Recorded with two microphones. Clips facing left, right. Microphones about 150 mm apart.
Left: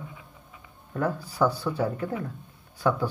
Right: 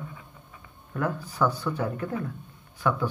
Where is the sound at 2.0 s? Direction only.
20° left (ahead or behind).